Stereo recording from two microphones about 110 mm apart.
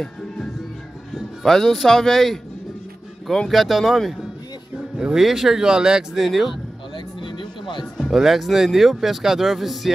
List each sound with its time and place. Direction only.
1.1 s speech: centre (ahead or behind)
7.2 s music: 45° left (ahead or behind)
7.8 s speech: centre (ahead or behind)